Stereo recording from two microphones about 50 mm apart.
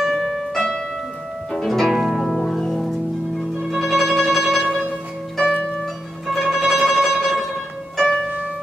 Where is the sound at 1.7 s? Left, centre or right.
Centre.